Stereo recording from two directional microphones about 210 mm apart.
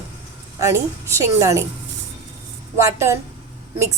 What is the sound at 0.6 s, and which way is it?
A woman's voice, 15° right (ahead or behind).